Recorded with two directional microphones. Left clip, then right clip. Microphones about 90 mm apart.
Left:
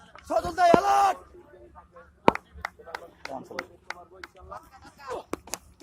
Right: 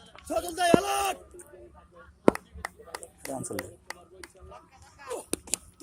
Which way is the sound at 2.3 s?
40° right (ahead or behind).